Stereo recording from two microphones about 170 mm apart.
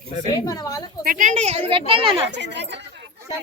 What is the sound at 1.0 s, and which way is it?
Speech, 50° right (ahead or behind).